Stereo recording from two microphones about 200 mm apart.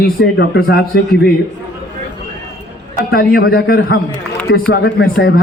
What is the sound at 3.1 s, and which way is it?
A man's voice, 50° left (ahead or behind).